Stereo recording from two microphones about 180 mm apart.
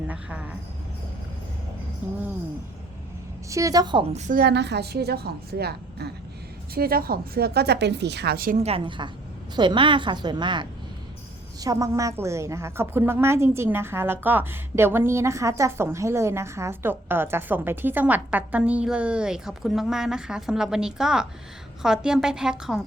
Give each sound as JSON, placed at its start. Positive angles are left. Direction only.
{"t": 0.1, "sound": "a woman's voice", "side_deg": -10}
{"t": 3.5, "sound": "a woman's voice", "side_deg": -20}
{"t": 4.1, "sound": "a woman's voice", "side_deg": -45}
{"t": 8.6, "sound": "a woman's voice", "side_deg": -30}